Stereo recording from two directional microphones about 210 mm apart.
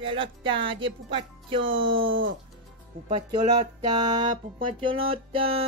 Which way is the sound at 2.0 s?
65° right (ahead or behind).